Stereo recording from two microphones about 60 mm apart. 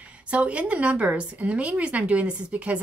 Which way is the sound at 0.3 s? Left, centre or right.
Right.